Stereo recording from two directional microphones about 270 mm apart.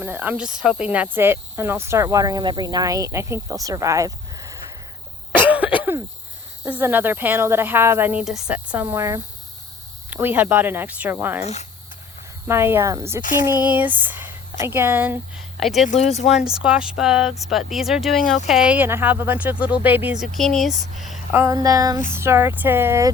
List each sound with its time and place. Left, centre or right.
0.0 s speech: centre
5.3 s cough: centre
6.7 s speech: centre
12.5 s speech: centre
15.9 s speech: left
16.3 s speech: centre